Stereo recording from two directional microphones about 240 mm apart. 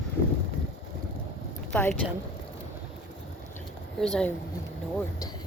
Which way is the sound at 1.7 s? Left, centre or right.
Centre.